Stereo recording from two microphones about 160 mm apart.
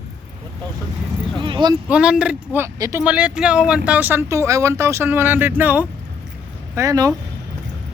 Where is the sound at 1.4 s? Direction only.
30° right (ahead or behind).